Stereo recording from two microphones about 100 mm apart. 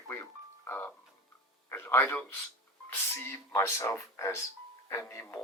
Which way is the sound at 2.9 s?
25° left (ahead or behind).